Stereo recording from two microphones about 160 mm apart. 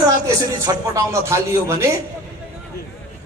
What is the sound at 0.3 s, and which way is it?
A man's voice, 20° right (ahead or behind).